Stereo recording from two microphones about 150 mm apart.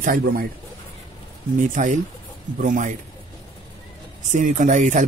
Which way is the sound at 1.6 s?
60° right (ahead or behind).